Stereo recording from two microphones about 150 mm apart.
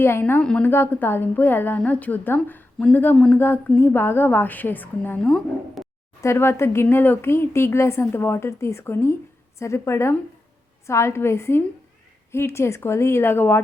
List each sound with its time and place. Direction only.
0.0 s a woman's voice: 15° left (ahead or behind)
6.2 s a woman's voice: 15° left (ahead or behind)